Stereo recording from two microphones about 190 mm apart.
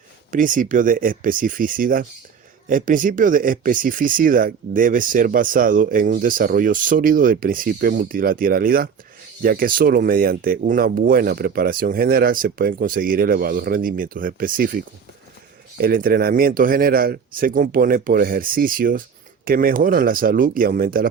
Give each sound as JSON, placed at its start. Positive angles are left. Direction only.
{"t": 0.3, "sound": "speech", "side_deg": -45}
{"t": 15.8, "sound": "speech", "side_deg": -50}